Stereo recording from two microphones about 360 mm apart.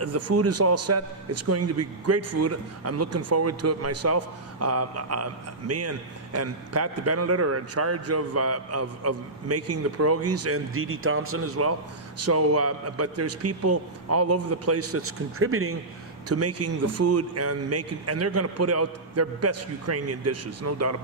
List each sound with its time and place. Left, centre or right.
0.0 s a man's voice: right